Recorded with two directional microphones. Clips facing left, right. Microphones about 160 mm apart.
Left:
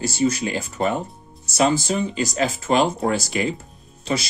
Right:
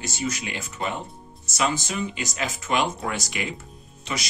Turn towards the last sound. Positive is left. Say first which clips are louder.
# left 7 dB
turn(degrees=30)  # may be behind; listen again after turning